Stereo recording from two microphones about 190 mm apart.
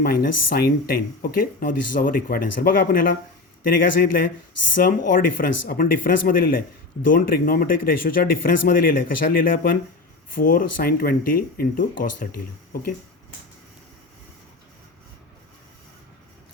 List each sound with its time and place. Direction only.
0.0 s speech: 55° left (ahead or behind)